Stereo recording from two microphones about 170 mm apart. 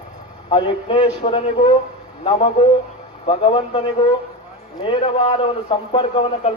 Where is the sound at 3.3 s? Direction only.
30° left (ahead or behind).